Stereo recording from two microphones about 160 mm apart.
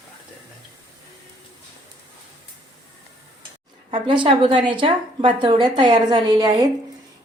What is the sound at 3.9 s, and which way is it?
A woman's voice, 30° right (ahead or behind).